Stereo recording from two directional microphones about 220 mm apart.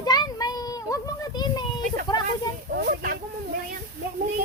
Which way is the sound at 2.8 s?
45° right (ahead or behind).